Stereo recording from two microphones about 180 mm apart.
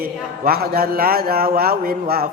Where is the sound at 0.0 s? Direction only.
55° right (ahead or behind).